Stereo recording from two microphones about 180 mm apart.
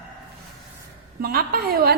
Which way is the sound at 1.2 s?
55° right (ahead or behind).